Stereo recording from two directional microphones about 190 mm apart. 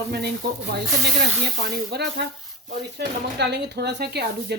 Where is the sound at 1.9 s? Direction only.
60° right (ahead or behind).